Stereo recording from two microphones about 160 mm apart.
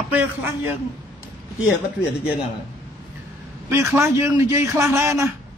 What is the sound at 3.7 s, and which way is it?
A man's voice, 15° right (ahead or behind).